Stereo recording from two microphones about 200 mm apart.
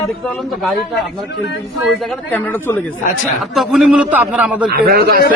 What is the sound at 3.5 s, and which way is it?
A man's voice, centre (ahead or behind).